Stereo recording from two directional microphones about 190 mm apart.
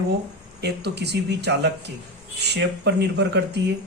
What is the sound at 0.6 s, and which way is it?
A man's voice, 60° right (ahead or behind).